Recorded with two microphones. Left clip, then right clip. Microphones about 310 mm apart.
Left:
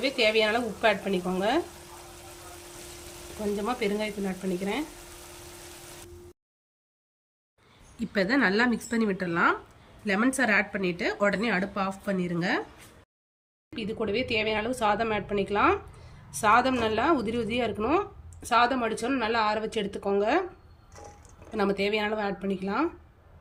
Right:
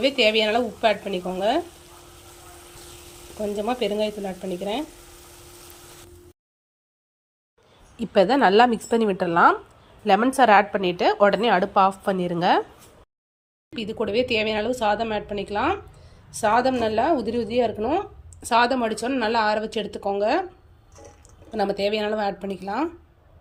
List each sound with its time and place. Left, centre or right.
0.0 s speech: centre
3.7 s speech: centre
7.9 s speech: centre
13.7 s speech: centre
21.5 s speech: centre